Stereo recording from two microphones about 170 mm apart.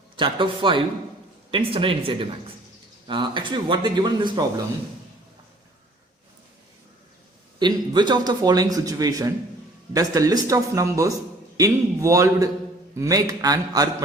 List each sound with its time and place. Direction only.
0.2 s a man's voice: 30° right (ahead or behind)
7.6 s a man's voice: 25° right (ahead or behind)